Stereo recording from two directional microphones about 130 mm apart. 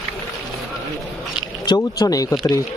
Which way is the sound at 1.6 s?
30° left (ahead or behind).